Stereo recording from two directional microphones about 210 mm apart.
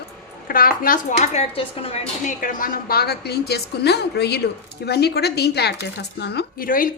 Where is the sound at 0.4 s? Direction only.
45° left (ahead or behind).